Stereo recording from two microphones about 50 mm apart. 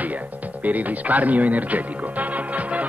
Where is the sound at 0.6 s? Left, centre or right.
Right.